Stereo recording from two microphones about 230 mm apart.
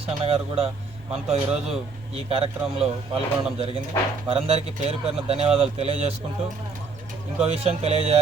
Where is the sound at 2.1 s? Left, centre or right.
Right.